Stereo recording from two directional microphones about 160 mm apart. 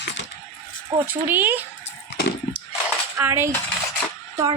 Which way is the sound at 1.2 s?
10° right (ahead or behind).